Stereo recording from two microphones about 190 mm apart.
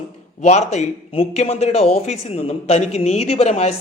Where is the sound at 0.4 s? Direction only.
35° left (ahead or behind).